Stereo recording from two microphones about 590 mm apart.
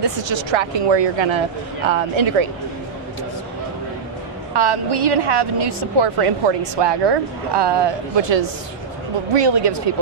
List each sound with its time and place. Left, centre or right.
0.0 s a woman's voice: right
4.6 s a woman's voice: right